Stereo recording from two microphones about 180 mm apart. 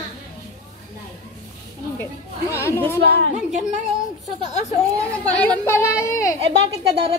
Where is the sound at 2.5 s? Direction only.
15° left (ahead or behind).